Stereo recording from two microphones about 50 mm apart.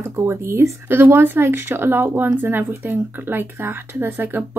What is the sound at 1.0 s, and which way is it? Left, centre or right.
Speech, right.